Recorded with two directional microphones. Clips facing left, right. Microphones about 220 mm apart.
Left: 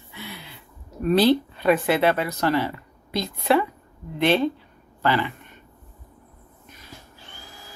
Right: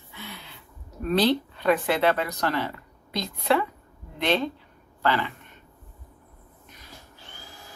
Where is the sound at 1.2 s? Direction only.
10° left (ahead or behind).